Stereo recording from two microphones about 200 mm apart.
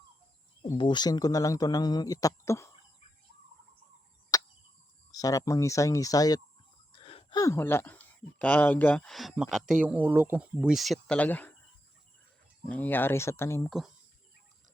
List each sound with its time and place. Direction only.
0.6 s speech: 20° left (ahead or behind)
4.3 s a sound: 20° left (ahead or behind)
5.1 s speech: 15° left (ahead or behind)
6.9 s speech: 30° left (ahead or behind); by 11.5 s 10° left (ahead or behind)
12.6 s speech: 5° left (ahead or behind)
13.7 s speech: centre (ahead or behind)